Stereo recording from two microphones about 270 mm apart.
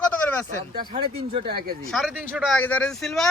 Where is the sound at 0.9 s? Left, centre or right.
Right.